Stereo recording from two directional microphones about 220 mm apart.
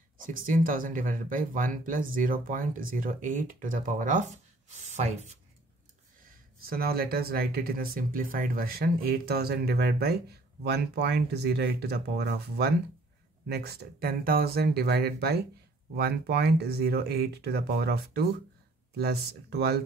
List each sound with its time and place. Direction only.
0.3 s speech: 40° right (ahead or behind)
6.6 s speech: 45° right (ahead or behind)